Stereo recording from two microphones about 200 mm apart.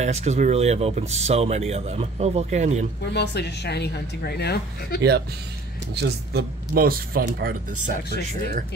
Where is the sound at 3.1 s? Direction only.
55° left (ahead or behind).